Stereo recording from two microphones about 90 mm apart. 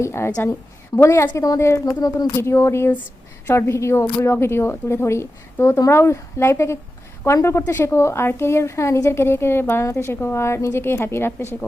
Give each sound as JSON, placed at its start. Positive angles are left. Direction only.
{"t": 0.0, "sound": "a woman's voice", "side_deg": 30}
{"t": 2.0, "sound": "speech", "side_deg": 45}
{"t": 2.3, "sound": "a woman's voice", "side_deg": 30}